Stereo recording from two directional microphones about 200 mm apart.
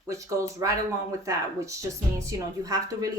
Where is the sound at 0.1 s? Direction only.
15° right (ahead or behind).